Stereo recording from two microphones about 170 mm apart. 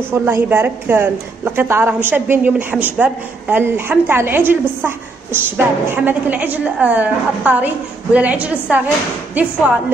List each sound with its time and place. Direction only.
0.1 s a woman's voice: 10° right (ahead or behind)